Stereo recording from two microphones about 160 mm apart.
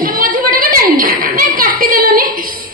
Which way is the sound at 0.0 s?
60° right (ahead or behind).